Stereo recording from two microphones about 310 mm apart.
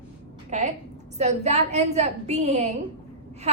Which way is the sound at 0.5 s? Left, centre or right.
Right.